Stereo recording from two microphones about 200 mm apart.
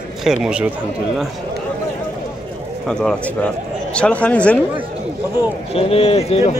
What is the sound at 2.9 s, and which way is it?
Speech, 5° left (ahead or behind).